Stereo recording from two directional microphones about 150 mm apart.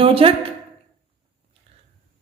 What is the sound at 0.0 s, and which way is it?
Speech, 40° right (ahead or behind).